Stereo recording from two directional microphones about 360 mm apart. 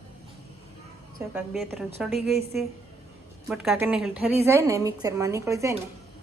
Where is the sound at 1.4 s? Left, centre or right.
Centre.